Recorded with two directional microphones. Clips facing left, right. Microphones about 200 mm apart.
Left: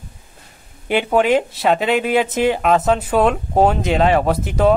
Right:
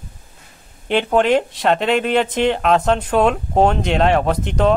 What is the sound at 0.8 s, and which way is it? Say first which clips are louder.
Speech: even; 10° left (ahead or behind).